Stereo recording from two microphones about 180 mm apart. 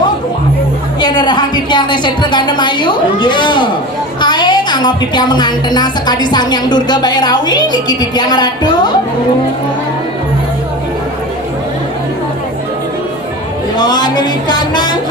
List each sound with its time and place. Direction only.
1.0 s a woman's voice: 25° left (ahead or behind)
13.7 s a woman's voice: 25° left (ahead or behind)